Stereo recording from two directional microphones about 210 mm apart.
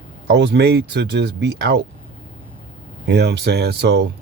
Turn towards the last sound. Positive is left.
turn(degrees=-50)  # may be behind; listen again after turning